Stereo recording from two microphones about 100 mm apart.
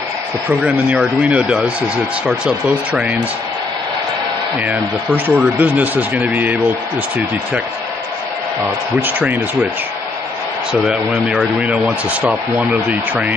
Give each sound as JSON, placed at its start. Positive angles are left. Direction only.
{"t": 0.5, "sound": "speech", "side_deg": -15}
{"t": 4.6, "sound": "speech", "side_deg": -15}
{"t": 10.7, "sound": "speech", "side_deg": -10}